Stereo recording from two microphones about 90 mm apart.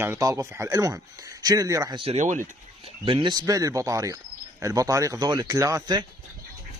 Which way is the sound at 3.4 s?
40° right (ahead or behind).